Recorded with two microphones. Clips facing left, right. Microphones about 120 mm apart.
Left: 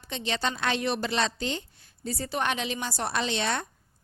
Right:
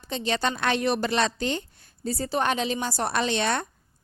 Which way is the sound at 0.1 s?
40° right (ahead or behind).